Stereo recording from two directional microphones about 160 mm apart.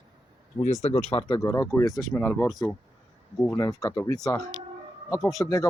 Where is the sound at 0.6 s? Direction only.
45° left (ahead or behind).